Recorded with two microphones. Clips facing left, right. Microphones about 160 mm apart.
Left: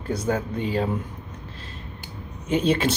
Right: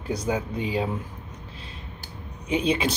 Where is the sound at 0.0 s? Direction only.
5° left (ahead or behind).